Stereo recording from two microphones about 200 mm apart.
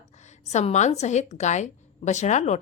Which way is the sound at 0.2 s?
35° left (ahead or behind).